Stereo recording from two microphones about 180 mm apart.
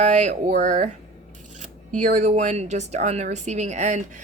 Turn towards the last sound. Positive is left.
turn(degrees=-40)  # may be behind; listen again after turning